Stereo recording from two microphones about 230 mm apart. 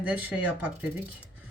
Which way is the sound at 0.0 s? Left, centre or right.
Centre.